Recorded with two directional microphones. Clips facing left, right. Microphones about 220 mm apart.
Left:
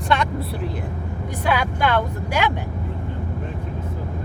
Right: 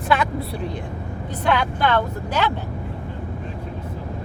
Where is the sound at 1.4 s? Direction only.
10° left (ahead or behind).